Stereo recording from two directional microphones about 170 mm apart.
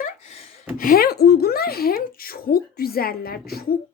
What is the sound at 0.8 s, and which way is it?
A woman's voice, 60° left (ahead or behind).